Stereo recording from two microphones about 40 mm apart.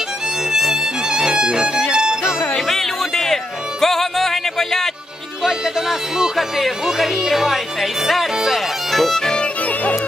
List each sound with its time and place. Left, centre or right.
0.5 s music: centre
2.6 s music: centre
5.4 s music: centre
6.3 s speech: centre
9.2 s music: left